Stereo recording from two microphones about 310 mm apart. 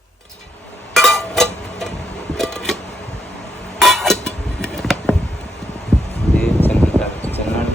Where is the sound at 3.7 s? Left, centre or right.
Centre.